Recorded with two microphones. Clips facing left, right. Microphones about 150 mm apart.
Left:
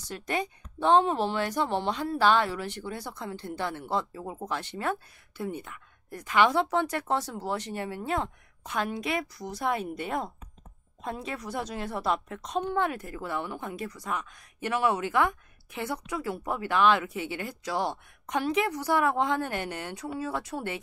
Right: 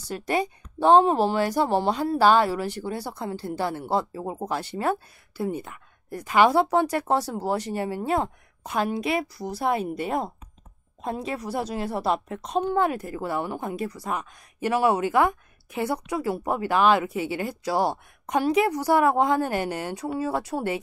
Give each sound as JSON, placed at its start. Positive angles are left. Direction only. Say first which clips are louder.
{"t": 0.7, "sound": "a woman's voice", "louder": "right 5 dB", "side_deg": -40}
{"t": 17.1, "sound": "speech", "louder": "right 6 dB", "side_deg": -10}
{"t": 17.6, "sound": "a woman's voice", "louder": "right 6 dB", "side_deg": -35}